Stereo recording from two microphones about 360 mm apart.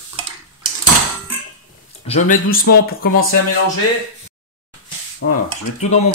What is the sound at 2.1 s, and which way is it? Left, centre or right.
Speech, left.